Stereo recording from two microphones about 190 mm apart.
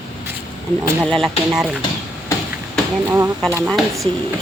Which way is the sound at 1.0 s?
Centre (ahead or behind).